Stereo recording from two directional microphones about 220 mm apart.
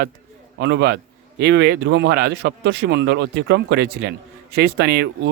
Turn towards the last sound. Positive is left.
turn(degrees=-50)  # may be behind; listen again after turning